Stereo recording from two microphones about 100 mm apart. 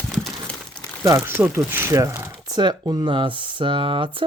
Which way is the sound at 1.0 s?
25° right (ahead or behind).